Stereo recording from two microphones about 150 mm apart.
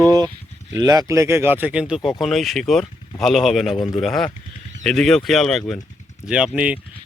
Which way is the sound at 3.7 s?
25° left (ahead or behind).